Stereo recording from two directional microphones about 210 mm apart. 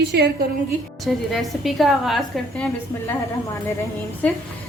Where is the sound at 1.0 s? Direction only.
Centre (ahead or behind).